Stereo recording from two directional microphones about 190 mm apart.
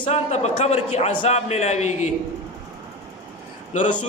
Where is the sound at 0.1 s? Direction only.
35° left (ahead or behind).